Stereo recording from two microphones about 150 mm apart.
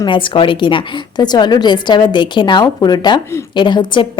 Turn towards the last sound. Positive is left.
turn(degrees=30)  # may be behind; listen again after turning